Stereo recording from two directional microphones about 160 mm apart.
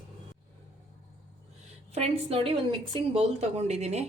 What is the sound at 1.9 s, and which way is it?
Speech, 40° right (ahead or behind).